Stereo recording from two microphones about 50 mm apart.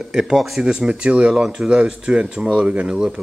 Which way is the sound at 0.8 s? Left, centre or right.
Right.